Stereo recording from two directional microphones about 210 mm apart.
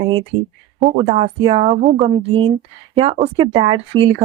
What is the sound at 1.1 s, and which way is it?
Speech, 30° right (ahead or behind).